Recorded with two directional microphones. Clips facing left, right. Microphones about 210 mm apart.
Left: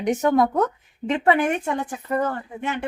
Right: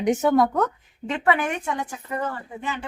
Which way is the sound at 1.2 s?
25° left (ahead or behind).